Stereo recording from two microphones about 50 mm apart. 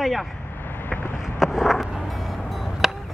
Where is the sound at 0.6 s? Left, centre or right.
Left.